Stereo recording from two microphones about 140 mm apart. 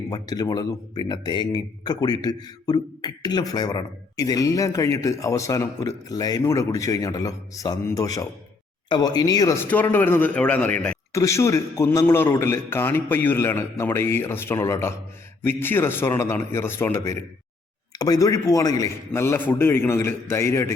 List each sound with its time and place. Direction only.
0.1 s speech: 30° left (ahead or behind)
9.6 s a man's voice: 15° left (ahead or behind)
11.1 s a man's voice: 20° left (ahead or behind)